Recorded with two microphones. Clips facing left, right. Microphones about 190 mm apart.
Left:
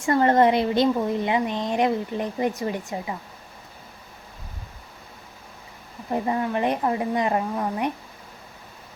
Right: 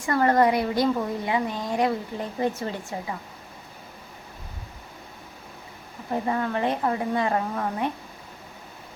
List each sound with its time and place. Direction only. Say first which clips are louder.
0.0 s a woman's voice: left 2 dB; 25° left (ahead or behind)
6.2 s a woman's voice: left 1 dB; 20° left (ahead or behind)